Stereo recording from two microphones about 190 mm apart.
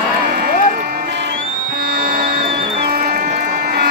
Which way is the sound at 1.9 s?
55° right (ahead or behind).